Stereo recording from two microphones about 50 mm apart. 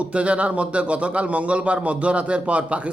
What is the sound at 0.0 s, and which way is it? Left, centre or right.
A man's voice, right.